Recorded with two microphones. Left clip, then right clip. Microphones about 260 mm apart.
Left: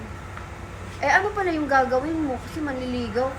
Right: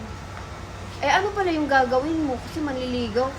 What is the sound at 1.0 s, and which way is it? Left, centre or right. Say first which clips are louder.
A woman's voice: left 1 dB; centre.